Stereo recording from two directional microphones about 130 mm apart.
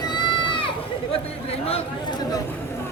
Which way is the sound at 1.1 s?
50° left (ahead or behind).